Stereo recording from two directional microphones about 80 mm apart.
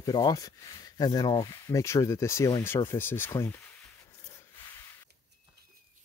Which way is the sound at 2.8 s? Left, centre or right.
Left.